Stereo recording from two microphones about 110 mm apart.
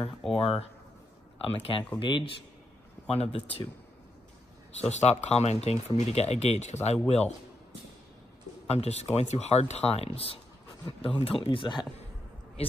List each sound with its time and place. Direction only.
0.3 s a man's voice: 60° left (ahead or behind)
2.0 s a man's voice: 45° left (ahead or behind)
3.1 s a man's voice: 65° left (ahead or behind)
4.7 s speech: 80° left
7.1 s speech: 75° left (ahead or behind)
8.6 s a man's voice: 75° left (ahead or behind); by 11.9 s 45° left (ahead or behind)